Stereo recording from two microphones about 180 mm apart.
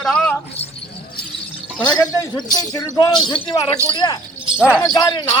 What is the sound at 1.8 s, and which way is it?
A man's voice, 25° left (ahead or behind).